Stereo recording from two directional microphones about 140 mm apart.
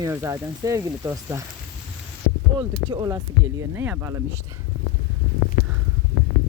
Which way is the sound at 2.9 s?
30° right (ahead or behind).